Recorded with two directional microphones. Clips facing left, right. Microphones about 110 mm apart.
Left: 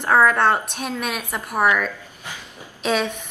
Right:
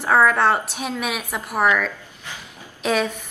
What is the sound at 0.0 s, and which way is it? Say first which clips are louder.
A woman's voice: even; centre (ahead or behind).